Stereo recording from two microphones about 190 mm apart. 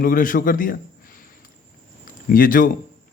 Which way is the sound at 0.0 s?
45° left (ahead or behind).